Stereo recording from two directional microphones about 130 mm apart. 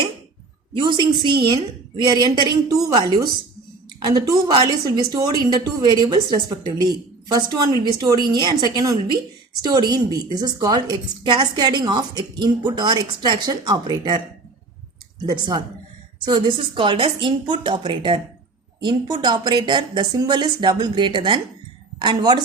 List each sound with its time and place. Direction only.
0.7 s a woman's voice: 40° right (ahead or behind)
15.3 s a woman's voice: 35° right (ahead or behind)